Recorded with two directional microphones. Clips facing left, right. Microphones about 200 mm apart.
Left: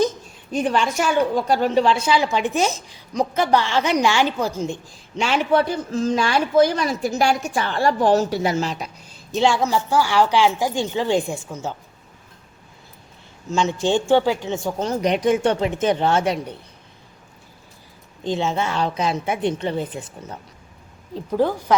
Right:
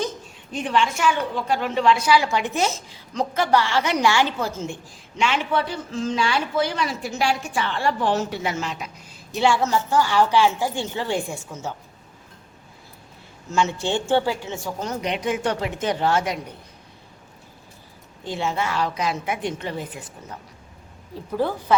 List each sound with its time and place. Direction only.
0.5 s a woman's voice: 40° left (ahead or behind); by 4.8 s 15° left (ahead or behind)
5.1 s speech: 35° left (ahead or behind)
9.3 s a woman's voice: 15° left (ahead or behind)
13.5 s a woman's voice: 15° left (ahead or behind)
15.0 s speech: 40° left (ahead or behind)
15.4 s a woman's voice: 25° left (ahead or behind)
18.3 s a woman's voice: 25° left (ahead or behind)
21.3 s a woman's voice: 15° left (ahead or behind)